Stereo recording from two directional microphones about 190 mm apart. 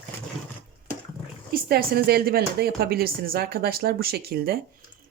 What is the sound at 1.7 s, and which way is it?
Speech, 55° right (ahead or behind).